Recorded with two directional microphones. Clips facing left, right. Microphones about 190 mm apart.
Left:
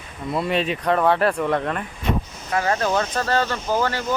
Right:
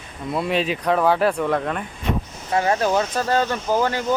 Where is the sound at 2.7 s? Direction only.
10° right (ahead or behind).